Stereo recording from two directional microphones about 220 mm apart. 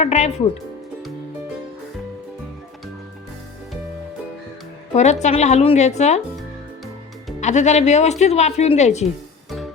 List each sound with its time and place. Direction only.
0.0 s speech: 30° left (ahead or behind)
4.9 s speech: 30° left (ahead or behind)
7.4 s speech: 30° left (ahead or behind)